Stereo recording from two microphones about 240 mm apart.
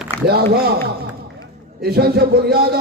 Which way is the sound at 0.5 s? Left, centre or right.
Right.